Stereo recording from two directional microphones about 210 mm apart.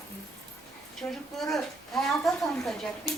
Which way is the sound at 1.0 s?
15° left (ahead or behind).